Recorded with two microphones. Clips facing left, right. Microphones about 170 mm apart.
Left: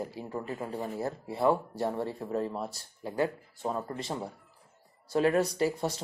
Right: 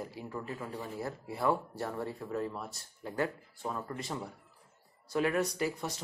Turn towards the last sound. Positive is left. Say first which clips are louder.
# left 5 dB
turn(degrees=30)  # may be behind; listen again after turning